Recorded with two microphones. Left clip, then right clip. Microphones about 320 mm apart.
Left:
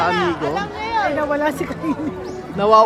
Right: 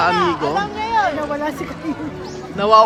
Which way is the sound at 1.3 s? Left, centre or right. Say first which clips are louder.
Left 3 dB; left.